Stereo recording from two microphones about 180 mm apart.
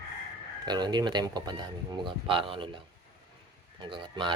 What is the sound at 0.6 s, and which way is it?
Speech, 25° right (ahead or behind).